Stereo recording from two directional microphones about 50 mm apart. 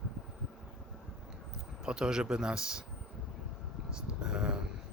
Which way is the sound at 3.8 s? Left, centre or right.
Centre.